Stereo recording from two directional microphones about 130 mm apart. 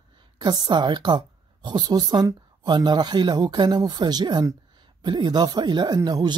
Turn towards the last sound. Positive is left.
turn(degrees=-30)  # may be behind; listen again after turning